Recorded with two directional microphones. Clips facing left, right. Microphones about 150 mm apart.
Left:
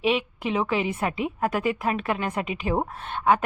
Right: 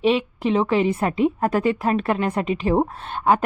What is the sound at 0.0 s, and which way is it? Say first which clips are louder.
A woman's voice: right 5 dB; 35° right (ahead or behind).